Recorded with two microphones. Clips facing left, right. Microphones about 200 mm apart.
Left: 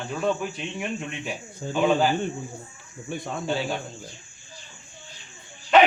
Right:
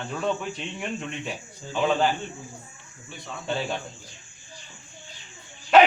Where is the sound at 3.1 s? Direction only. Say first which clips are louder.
Left 9 dB; 50° left (ahead or behind).